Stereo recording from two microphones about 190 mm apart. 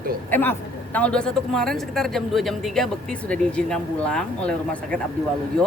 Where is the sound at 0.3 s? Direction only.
10° left (ahead or behind).